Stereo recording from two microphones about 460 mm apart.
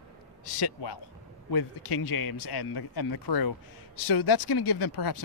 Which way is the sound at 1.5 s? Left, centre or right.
Left.